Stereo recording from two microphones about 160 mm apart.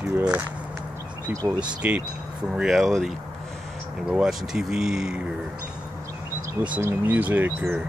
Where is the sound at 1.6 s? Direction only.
5° right (ahead or behind).